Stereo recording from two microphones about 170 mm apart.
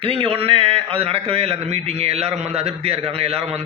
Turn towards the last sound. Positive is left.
turn(degrees=-35)  # may be behind; listen again after turning